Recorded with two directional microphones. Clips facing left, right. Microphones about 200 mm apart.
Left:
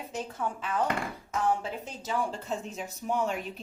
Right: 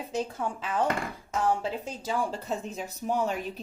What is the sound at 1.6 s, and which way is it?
A woman's voice, 35° right (ahead or behind).